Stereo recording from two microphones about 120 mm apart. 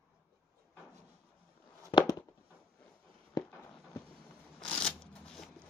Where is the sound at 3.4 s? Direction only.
35° left (ahead or behind).